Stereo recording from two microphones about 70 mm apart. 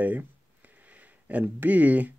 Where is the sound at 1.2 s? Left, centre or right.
Right.